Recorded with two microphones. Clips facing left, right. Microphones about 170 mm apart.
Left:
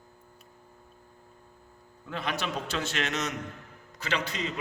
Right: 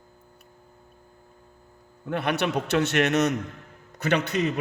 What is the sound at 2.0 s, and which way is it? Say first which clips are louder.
A man's voice: right 7 dB; 65° right (ahead or behind).